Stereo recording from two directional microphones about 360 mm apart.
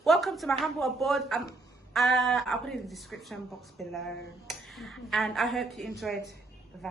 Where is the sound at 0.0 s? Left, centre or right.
Centre.